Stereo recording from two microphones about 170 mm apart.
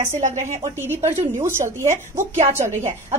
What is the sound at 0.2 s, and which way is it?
Speech, 45° right (ahead or behind).